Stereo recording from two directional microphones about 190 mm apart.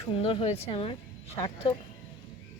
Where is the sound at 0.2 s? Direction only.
30° left (ahead or behind).